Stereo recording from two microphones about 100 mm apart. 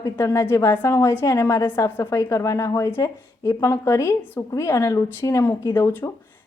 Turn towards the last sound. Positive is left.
turn(degrees=35)  # may be behind; listen again after turning